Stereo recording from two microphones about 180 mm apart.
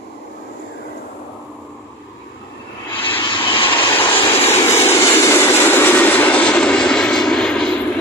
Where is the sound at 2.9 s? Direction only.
30° left (ahead or behind).